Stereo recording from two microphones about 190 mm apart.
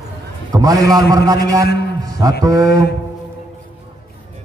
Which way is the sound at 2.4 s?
20° right (ahead or behind).